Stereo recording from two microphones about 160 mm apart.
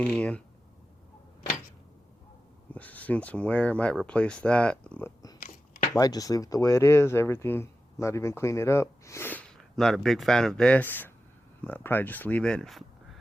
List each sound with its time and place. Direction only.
0.0 s speech: 5° left (ahead or behind)
2.7 s speech: 10° left (ahead or behind)
5.4 s a sound: 65° left (ahead or behind)
6.0 s speech: 20° left (ahead or behind); by 12.8 s 5° left (ahead or behind)